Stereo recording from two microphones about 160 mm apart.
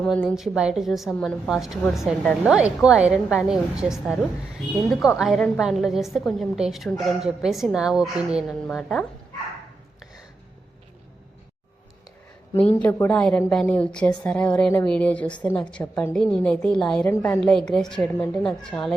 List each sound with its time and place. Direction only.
0.3 s a woman's voice: 5° right (ahead or behind)
12.7 s a woman's voice: 10° left (ahead or behind)
17.1 s a woman's voice: 15° left (ahead or behind)
17.4 s a woman's voice: 5° left (ahead or behind)